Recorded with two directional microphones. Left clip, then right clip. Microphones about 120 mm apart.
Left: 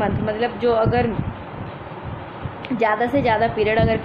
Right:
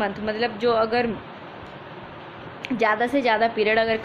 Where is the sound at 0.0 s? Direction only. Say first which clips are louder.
Left 3 dB; 35° right (ahead or behind).